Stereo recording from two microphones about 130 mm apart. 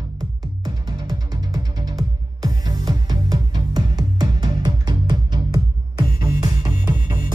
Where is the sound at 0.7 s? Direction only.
30° right (ahead or behind).